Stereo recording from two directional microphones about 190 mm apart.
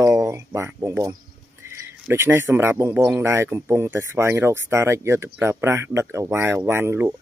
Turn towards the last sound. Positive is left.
turn(degrees=-10)  # may be behind; listen again after turning